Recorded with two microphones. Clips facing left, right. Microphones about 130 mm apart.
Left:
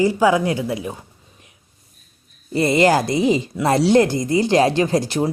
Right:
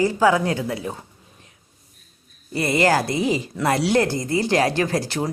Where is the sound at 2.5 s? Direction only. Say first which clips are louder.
Left 4 dB; 25° left (ahead or behind).